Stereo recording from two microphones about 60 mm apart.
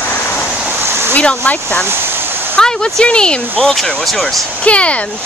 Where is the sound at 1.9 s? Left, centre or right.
Right.